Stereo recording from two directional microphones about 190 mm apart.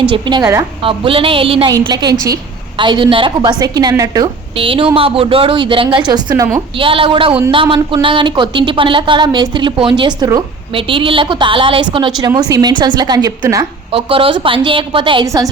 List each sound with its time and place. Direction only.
0.1 s a woman's voice: 25° right (ahead or behind)
13.9 s speech: 30° right (ahead or behind)